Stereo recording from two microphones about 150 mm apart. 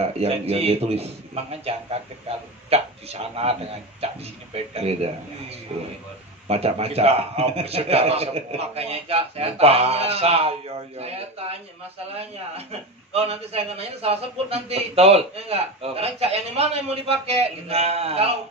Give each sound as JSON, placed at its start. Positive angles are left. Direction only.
{"t": 0.0, "sound": "a man's voice", "side_deg": -40}
{"t": 13.1, "sound": "a man's voice", "side_deg": -40}